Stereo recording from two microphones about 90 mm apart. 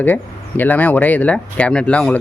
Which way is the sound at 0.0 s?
20° left (ahead or behind).